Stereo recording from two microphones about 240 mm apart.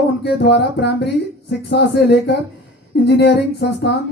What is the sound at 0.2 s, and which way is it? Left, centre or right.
Speech, left.